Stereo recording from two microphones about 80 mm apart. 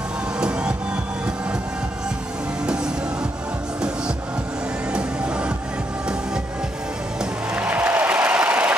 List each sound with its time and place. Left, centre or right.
0.4 s music: centre
4.9 s music: centre
7.5 s music: centre